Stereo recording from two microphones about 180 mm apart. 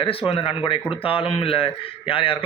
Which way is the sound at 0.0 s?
30° left (ahead or behind).